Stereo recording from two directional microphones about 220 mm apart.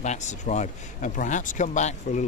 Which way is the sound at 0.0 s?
30° left (ahead or behind).